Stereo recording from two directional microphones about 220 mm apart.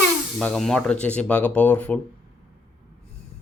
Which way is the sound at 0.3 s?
Centre (ahead or behind).